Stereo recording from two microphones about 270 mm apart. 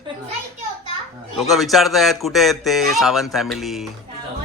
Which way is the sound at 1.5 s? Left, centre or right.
Centre.